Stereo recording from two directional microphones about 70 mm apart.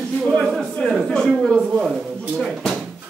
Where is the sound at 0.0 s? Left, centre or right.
Centre.